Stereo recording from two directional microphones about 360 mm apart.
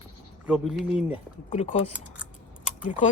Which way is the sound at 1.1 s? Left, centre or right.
Centre.